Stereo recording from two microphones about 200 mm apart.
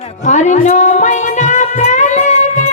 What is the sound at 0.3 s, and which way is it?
Music, 35° left (ahead or behind).